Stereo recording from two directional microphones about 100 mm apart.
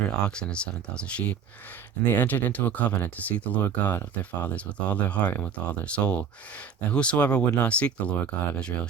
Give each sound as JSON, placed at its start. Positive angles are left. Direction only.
{"t": 0.2, "sound": "speech", "side_deg": 10}